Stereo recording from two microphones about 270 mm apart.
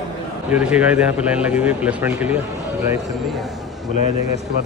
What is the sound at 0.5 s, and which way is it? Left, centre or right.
A man's voice, centre.